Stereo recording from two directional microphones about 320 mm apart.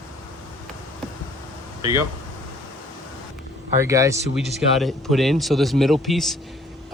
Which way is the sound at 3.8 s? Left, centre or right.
Centre.